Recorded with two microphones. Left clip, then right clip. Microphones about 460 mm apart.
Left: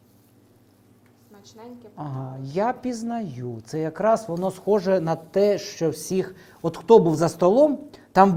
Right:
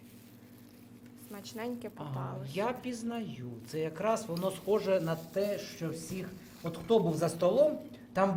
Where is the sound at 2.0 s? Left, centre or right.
Left.